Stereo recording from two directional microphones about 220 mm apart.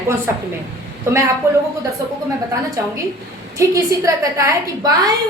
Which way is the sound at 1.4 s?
15° right (ahead or behind).